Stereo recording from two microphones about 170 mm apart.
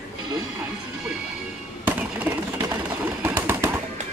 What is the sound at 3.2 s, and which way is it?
Bird, 15° right (ahead or behind).